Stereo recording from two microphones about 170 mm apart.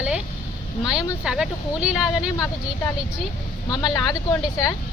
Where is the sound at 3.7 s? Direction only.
20° left (ahead or behind).